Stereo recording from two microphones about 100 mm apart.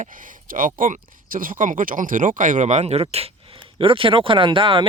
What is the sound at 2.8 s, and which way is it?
Speech, 90° right.